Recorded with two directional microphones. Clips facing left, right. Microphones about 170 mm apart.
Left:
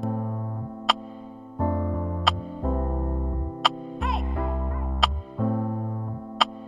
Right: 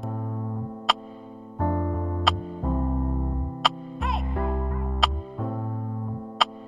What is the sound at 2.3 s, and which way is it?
Music, centre (ahead or behind).